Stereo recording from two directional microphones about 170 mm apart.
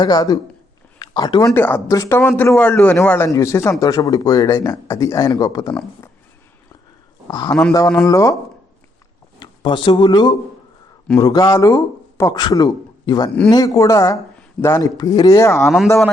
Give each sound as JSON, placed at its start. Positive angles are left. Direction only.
{"t": 0.0, "sound": "speech", "side_deg": 25}
{"t": 7.3, "sound": "a man's voice", "side_deg": 25}
{"t": 9.4, "sound": "speech", "side_deg": 30}
{"t": 15.6, "sound": "a man's voice", "side_deg": 0}